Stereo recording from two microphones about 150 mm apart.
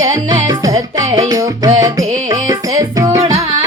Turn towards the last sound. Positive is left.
turn(degrees=-20)  # may be behind; listen again after turning